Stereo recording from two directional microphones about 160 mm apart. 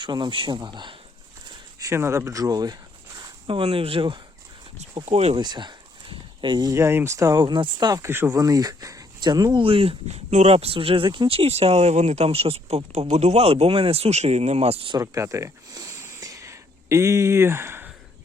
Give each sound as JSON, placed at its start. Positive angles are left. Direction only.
{"t": 0.0, "sound": "speech", "side_deg": -30}
{"t": 1.8, "sound": "speech", "side_deg": -15}
{"t": 5.4, "sound": "speech", "side_deg": -25}
{"t": 14.9, "sound": "a sound", "side_deg": -20}